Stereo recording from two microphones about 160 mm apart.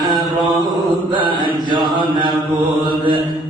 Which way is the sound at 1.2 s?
30° right (ahead or behind).